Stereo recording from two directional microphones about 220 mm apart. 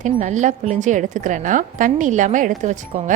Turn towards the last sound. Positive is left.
turn(degrees=-35)  # may be behind; listen again after turning